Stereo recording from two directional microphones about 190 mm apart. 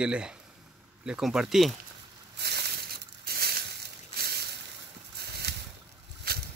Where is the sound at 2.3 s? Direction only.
60° right (ahead or behind).